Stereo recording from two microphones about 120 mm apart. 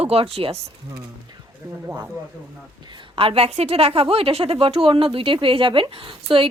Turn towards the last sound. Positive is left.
turn(degrees=-45)  # may be behind; listen again after turning